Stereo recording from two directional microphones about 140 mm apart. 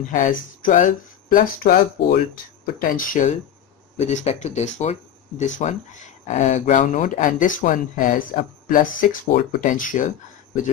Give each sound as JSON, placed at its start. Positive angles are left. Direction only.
{"t": 0.0, "sound": "speech", "side_deg": 70}
{"t": 2.6, "sound": "speech", "side_deg": 80}
{"t": 3.9, "sound": "speech", "side_deg": 55}